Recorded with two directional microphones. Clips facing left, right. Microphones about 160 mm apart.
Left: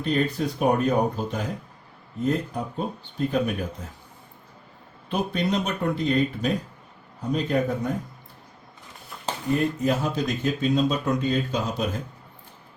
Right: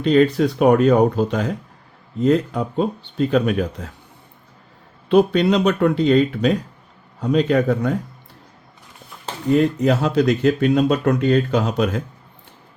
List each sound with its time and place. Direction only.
0.0 s speech: 85° right
5.0 s speech: 70° right (ahead or behind)
9.6 s speech: 75° right (ahead or behind)